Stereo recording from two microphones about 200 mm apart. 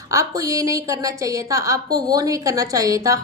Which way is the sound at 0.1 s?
15° right (ahead or behind).